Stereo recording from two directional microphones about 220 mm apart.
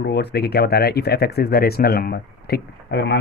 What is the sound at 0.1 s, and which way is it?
Speech, 50° left (ahead or behind).